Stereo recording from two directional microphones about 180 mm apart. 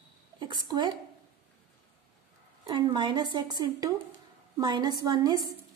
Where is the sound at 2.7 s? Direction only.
25° right (ahead or behind).